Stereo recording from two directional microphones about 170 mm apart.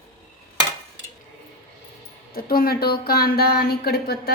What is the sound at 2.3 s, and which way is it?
Speech, 60° left (ahead or behind).